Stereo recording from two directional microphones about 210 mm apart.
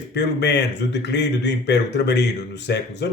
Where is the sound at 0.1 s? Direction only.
55° left (ahead or behind).